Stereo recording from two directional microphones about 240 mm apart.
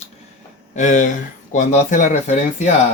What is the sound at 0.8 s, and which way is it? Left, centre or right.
Speech, left.